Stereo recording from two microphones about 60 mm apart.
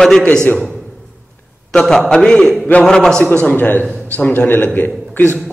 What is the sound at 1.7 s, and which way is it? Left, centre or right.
Speech, centre.